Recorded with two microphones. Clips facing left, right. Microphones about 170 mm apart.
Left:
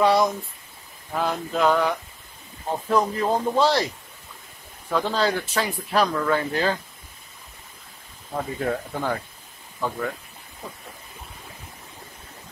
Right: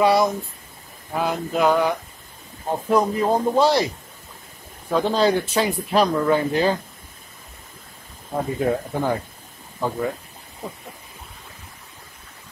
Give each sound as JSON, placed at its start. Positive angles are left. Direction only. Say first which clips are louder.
{"t": 0.0, "sound": "speech", "louder": "right 2 dB", "side_deg": -5}
{"t": 4.8, "sound": "speech", "louder": "right 4 dB", "side_deg": -20}
{"t": 8.4, "sound": "speech", "louder": "right 4 dB", "side_deg": -15}